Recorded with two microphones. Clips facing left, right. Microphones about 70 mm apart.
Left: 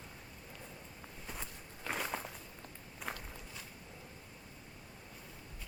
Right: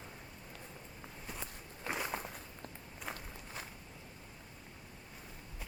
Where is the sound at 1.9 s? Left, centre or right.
Centre.